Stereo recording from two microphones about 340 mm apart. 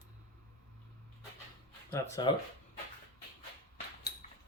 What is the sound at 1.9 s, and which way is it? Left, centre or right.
Speech, centre.